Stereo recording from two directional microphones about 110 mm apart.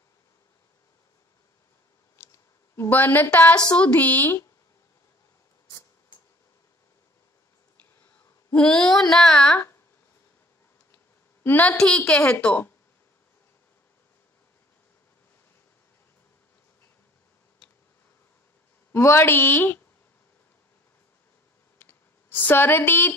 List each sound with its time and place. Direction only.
2.1 s a sound: 25° left (ahead or behind)
3.7 s a woman's voice: 15° left (ahead or behind)
8.5 s speech: 5° left (ahead or behind)
11.4 s a woman's voice: 15° left (ahead or behind)
18.9 s a woman's voice: 25° left (ahead or behind)
21.7 s a sound: 20° left (ahead or behind)